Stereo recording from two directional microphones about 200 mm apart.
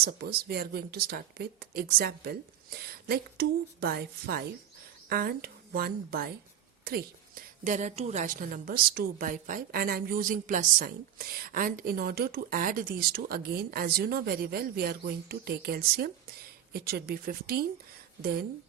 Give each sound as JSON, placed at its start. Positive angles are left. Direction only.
{"t": 0.0, "sound": "a woman's voice", "side_deg": -50}